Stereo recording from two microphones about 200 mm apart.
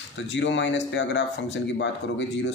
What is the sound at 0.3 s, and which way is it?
Speech, 65° left (ahead or behind).